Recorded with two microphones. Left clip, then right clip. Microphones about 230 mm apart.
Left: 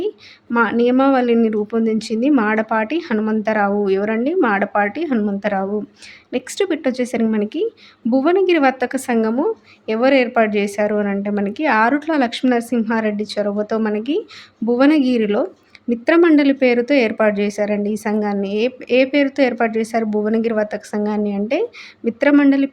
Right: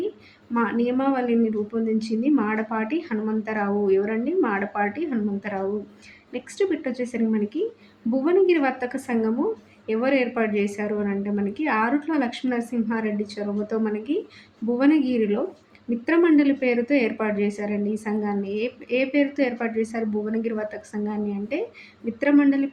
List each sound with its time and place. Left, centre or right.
0.5 s a woman's voice: left